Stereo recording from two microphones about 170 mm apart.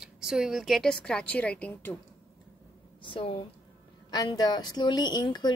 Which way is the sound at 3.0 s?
35° left (ahead or behind).